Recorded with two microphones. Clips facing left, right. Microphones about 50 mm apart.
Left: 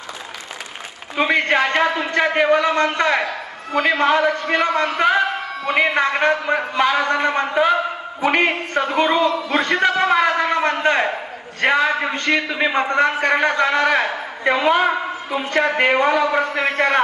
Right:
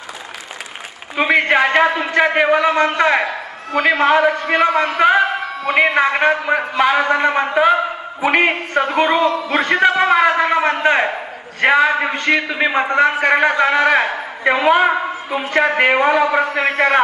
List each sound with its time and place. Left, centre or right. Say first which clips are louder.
1.1 s a man's voice: right 3 dB; centre
3.7 s a man's voice: right 3 dB; centre
5.0 s a sound: right 5 dB; centre
5.9 s a man's voice: right 3 dB; centre
9.7 s a sound: right 4 dB; centre
10.8 s a man's voice: right 2 dB; centre